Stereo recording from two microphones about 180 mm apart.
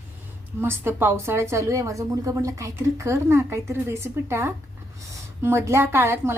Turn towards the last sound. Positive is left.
turn(degrees=-15)  # may be behind; listen again after turning